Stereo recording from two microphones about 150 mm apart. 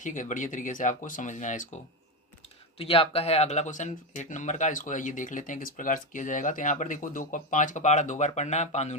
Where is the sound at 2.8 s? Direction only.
40° left (ahead or behind).